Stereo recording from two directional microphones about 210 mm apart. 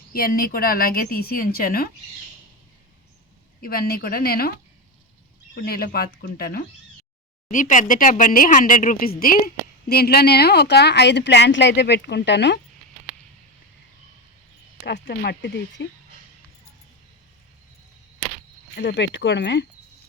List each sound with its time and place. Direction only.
0.1 s speech: 45° left (ahead or behind)
3.6 s speech: 45° left (ahead or behind)
5.5 s speech: 45° left (ahead or behind)
14.8 s speech: 50° left (ahead or behind)
18.8 s speech: 55° left (ahead or behind)